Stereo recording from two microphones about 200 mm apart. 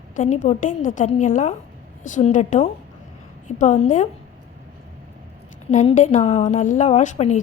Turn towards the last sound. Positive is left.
turn(degrees=35)  # may be behind; listen again after turning